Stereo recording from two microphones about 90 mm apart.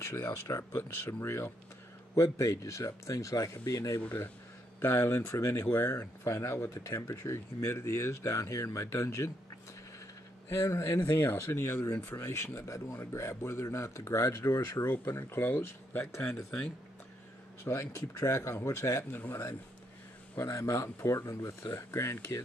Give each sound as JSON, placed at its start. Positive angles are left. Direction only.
{"t": 0.0, "sound": "speech", "side_deg": 30}
{"t": 4.0, "sound": "speech", "side_deg": 20}
{"t": 10.6, "sound": "speech", "side_deg": 30}
{"t": 11.9, "sound": "speech", "side_deg": 20}
{"t": 12.2, "sound": "speech", "side_deg": 30}
{"t": 17.6, "sound": "speech", "side_deg": 30}